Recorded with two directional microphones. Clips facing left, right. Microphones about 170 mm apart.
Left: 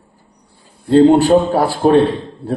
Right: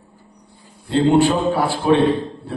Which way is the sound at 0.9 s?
40° left (ahead or behind).